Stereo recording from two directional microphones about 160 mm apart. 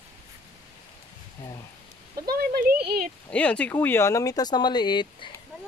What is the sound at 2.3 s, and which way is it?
Speech, 75° right (ahead or behind).